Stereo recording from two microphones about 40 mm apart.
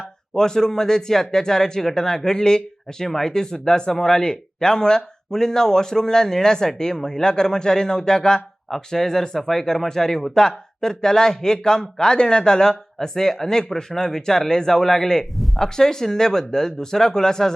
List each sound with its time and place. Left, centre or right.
0.3 s speech: centre